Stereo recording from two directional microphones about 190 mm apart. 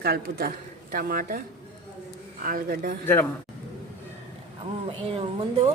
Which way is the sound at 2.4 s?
50° right (ahead or behind).